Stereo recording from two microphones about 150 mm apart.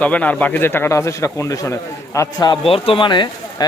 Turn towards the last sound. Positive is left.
turn(degrees=30)  # may be behind; listen again after turning